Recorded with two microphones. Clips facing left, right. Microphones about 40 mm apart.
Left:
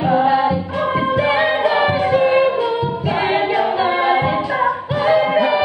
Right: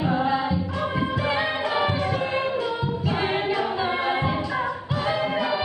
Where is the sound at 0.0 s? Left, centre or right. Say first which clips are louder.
Left 8 dB; left.